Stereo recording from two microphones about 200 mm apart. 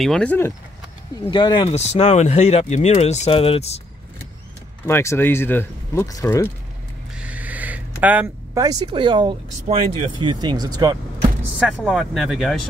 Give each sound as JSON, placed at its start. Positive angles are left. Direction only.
{"t": 0.0, "sound": "speech", "side_deg": 5}
{"t": 1.3, "sound": "speech", "side_deg": 25}
{"t": 4.8, "sound": "speech", "side_deg": 10}
{"t": 7.2, "sound": "a sound", "side_deg": -5}
{"t": 8.0, "sound": "speech", "side_deg": -5}
{"t": 8.6, "sound": "speech", "side_deg": -20}
{"t": 11.6, "sound": "speech", "side_deg": -5}